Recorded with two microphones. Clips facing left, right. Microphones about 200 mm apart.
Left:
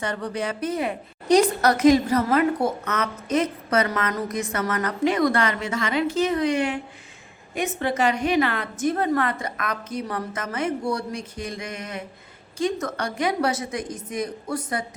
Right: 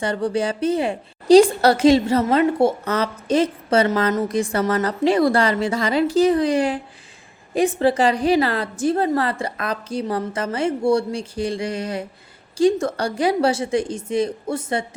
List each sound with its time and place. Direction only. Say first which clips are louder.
0.0 s a woman's voice: right 6 dB; 30° right (ahead or behind)